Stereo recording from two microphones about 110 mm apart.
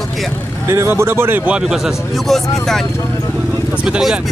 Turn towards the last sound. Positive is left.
turn(degrees=-5)  # may be behind; listen again after turning